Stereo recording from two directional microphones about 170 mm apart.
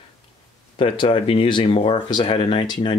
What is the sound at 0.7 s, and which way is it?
Speech, 30° left (ahead or behind).